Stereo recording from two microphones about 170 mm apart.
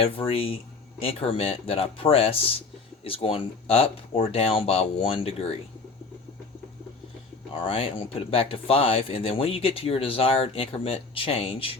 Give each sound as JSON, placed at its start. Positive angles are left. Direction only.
{"t": 0.0, "sound": "speech", "side_deg": 35}
{"t": 7.6, "sound": "speech", "side_deg": 30}